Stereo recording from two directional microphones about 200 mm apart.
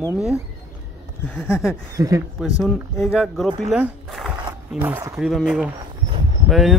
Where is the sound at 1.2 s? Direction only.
10° left (ahead or behind).